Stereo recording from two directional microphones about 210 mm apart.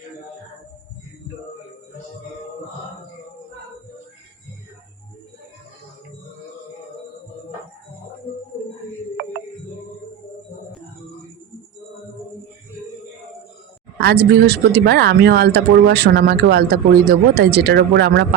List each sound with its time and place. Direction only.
14.0 s speech: 50° right (ahead or behind)